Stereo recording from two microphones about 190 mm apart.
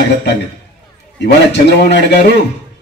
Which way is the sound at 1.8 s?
60° left (ahead or behind).